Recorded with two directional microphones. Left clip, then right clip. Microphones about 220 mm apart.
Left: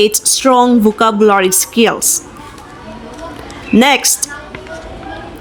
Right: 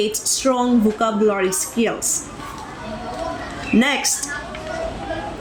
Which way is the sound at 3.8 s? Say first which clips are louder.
Left 10 dB; 45° left (ahead or behind).